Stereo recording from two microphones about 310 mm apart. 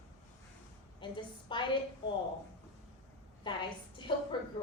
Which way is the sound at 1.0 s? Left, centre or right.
Centre.